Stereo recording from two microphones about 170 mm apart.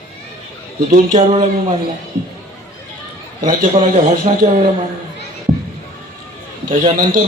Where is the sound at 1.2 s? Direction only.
30° right (ahead or behind).